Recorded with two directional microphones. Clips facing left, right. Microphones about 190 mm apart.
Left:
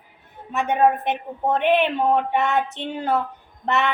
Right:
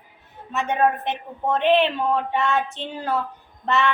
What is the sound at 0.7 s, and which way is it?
A woman's voice, 10° left (ahead or behind).